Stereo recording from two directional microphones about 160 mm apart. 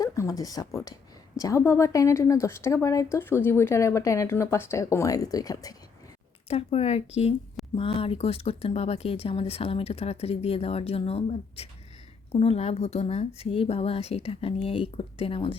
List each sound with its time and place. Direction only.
0.0 s speech: 20° left (ahead or behind)
6.5 s speech: 40° left (ahead or behind)